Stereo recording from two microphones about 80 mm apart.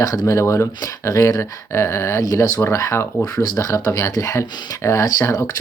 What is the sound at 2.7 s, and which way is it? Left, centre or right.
Speech, left.